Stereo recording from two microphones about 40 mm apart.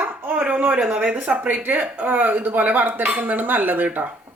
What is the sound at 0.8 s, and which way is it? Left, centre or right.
Speech, right.